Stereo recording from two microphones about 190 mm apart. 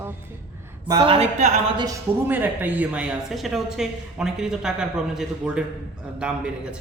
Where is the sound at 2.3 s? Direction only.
10° right (ahead or behind).